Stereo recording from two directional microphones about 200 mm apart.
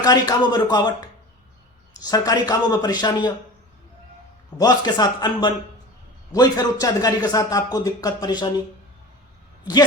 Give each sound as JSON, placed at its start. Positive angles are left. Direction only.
{"t": 0.0, "sound": "a man's voice", "side_deg": 20}
{"t": 4.5, "sound": "a man's voice", "side_deg": 20}